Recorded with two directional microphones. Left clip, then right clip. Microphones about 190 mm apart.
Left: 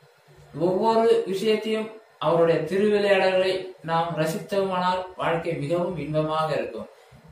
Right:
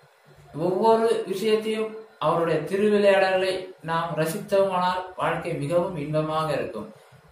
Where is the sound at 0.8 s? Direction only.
15° right (ahead or behind).